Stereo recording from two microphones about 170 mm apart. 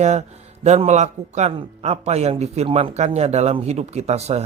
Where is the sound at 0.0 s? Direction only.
40° right (ahead or behind).